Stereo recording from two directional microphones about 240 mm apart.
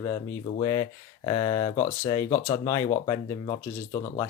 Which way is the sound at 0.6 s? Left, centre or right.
Centre.